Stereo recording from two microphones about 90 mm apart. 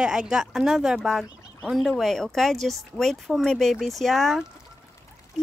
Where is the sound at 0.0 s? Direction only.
5° right (ahead or behind).